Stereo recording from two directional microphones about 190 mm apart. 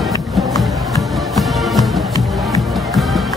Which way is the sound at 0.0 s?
Centre (ahead or behind).